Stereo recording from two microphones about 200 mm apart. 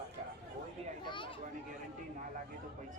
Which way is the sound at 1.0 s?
25° left (ahead or behind).